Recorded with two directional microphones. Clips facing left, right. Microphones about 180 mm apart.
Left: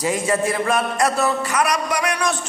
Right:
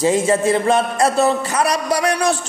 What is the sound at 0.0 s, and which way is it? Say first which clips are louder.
A man's voice: right 5 dB; 25° right (ahead or behind).